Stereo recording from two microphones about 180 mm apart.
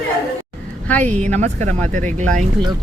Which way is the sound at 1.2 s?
40° right (ahead or behind).